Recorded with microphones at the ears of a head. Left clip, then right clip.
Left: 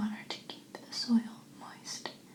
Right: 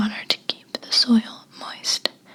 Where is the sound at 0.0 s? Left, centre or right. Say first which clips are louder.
Right 16 dB; right.